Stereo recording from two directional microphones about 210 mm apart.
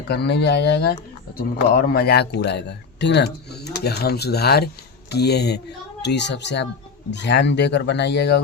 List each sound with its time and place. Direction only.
0.1 s speech: 55° left (ahead or behind)